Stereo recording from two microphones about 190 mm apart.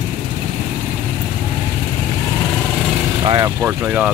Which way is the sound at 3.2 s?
25° right (ahead or behind).